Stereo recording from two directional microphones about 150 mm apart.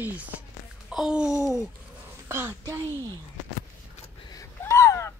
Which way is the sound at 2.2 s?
15° right (ahead or behind).